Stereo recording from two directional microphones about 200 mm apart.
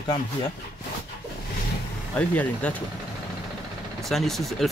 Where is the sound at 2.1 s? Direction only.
5° left (ahead or behind).